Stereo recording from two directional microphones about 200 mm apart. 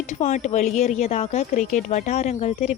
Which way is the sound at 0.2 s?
35° left (ahead or behind).